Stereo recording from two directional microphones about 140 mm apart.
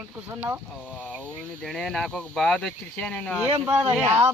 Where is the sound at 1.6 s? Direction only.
5° left (ahead or behind).